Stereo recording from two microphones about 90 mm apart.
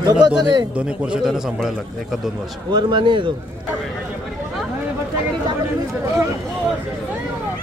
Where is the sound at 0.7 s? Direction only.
10° right (ahead or behind).